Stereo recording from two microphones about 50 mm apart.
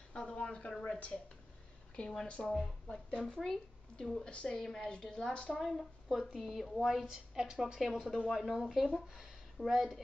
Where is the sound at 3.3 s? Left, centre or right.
Centre.